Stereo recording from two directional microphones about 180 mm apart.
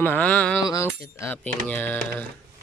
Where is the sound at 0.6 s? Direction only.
20° left (ahead or behind).